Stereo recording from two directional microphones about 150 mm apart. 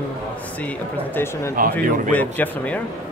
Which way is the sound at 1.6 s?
70° right (ahead or behind).